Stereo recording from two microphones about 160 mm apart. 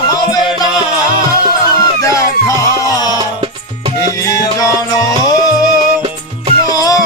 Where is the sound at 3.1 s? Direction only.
30° right (ahead or behind).